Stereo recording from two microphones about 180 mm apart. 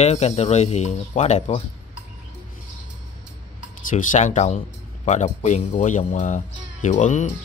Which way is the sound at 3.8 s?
45° left (ahead or behind).